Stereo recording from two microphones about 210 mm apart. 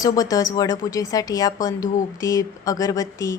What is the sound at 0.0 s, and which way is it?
A woman's voice, 15° left (ahead or behind).